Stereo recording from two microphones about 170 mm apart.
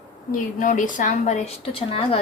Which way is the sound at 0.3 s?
50° left (ahead or behind).